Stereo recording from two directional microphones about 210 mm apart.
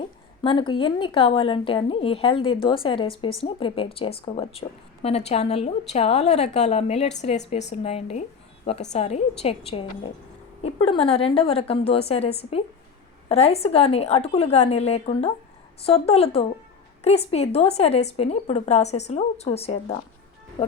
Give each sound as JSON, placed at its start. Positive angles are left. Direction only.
{"t": 0.4, "sound": "a woman's voice", "side_deg": 25}